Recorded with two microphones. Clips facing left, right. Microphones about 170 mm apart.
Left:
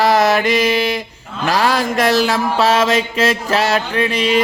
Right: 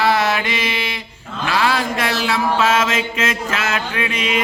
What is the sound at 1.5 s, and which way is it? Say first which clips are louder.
Mantra: left 3 dB; 40° left (ahead or behind).